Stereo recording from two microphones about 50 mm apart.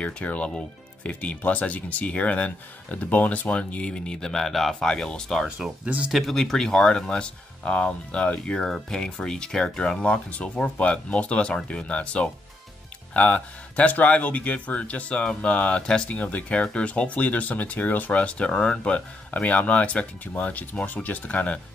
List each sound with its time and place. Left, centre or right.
0.0 s speech: left
5.6 s speech: centre
6.1 s speech: centre; by 8.6 s left
8.6 s speech: centre; by 21.5 s left